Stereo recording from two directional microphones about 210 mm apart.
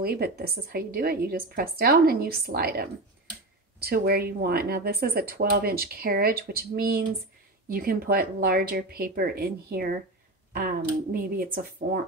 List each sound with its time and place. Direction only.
0.0 s speech: 45° right (ahead or behind)